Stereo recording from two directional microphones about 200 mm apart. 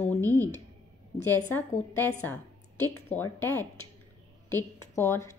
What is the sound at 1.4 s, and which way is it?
A woman's voice, 10° left (ahead or behind).